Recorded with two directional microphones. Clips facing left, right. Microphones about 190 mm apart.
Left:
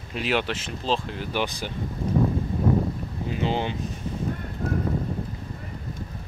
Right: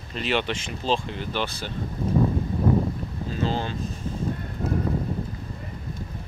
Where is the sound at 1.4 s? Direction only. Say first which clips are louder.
Left 4 dB; 15° left (ahead or behind).